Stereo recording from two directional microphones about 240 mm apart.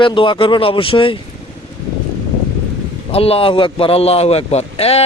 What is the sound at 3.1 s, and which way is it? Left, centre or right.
Speech, left.